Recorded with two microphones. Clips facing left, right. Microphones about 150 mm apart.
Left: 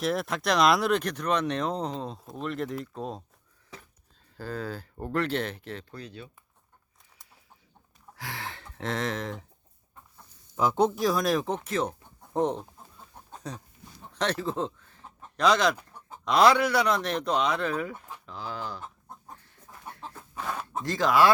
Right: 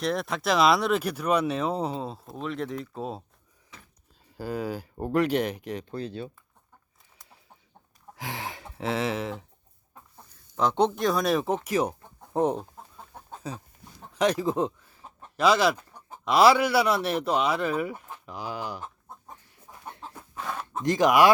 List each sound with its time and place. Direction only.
0.0 s speech: centre (ahead or behind)
4.4 s speech: 10° right (ahead or behind)
5.9 s speech: 30° right (ahead or behind)
8.1 s speech: 15° right (ahead or behind)
10.6 s speech: 5° left (ahead or behind); by 18.8 s 15° right (ahead or behind)
20.4 s a sound: centre (ahead or behind)
20.8 s speech: 15° right (ahead or behind)